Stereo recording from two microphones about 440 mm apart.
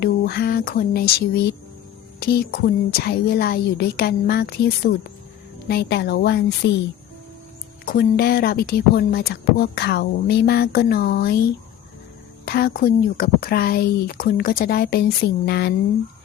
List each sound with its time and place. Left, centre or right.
0.0 s speech: left
7.9 s speech: left
12.5 s speech: left